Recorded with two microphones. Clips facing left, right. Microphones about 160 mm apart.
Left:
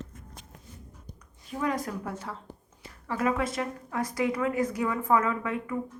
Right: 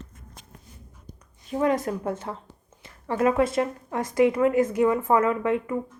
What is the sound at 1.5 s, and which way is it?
A woman's voice, 25° right (ahead or behind).